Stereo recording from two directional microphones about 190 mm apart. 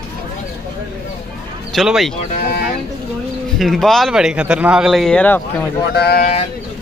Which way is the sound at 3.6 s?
Centre (ahead or behind).